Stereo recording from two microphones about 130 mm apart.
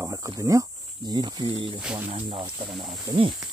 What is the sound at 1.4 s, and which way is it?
Speech, 40° right (ahead or behind).